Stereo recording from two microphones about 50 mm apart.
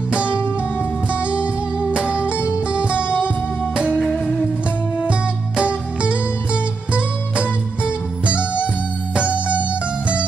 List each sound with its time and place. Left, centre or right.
1.2 s music: right
3.0 s music: left
3.7 s music: right
4.1 s music: left
5.6 s music: right